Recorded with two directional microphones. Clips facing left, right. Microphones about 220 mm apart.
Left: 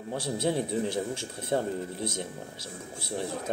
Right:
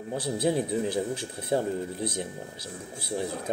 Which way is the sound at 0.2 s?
25° left (ahead or behind).